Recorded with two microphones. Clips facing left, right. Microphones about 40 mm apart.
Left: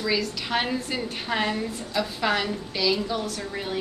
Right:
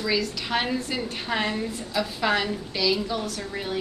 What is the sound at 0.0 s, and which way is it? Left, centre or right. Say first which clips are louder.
A woman's voice: even; centre.